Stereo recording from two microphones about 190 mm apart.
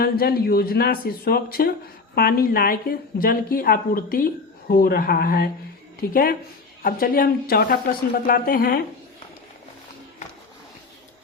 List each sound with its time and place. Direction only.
0.0 s speech: 55° left (ahead or behind)